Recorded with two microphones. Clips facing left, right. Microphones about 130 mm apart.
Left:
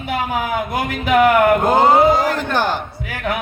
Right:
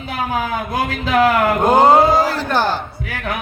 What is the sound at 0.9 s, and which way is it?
Speech, 20° left (ahead or behind).